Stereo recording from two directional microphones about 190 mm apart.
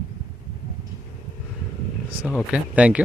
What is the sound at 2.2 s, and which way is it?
Speech, 5° right (ahead or behind).